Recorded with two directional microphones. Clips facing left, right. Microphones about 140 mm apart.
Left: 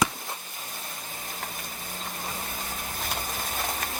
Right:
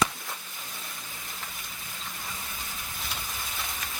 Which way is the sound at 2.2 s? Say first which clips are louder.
Left 6 dB; 45° left (ahead or behind).